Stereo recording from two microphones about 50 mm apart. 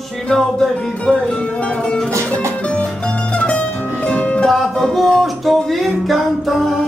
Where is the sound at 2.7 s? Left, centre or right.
Left.